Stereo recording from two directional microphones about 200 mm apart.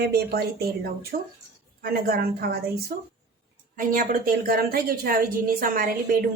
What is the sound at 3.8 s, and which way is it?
A woman's voice, 40° right (ahead or behind).